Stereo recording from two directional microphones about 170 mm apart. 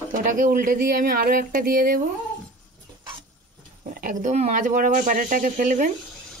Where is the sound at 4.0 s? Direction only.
55° right (ahead or behind).